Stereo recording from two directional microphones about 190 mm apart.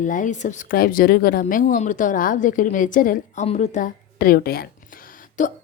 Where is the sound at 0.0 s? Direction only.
45° left (ahead or behind).